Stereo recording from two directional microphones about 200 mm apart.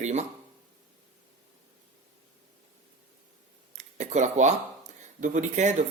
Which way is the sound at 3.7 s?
35° right (ahead or behind).